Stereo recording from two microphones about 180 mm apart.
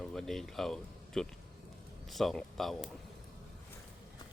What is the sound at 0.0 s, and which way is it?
Speech, centre (ahead or behind).